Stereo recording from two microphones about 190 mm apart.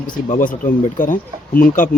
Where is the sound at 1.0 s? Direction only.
45° left (ahead or behind).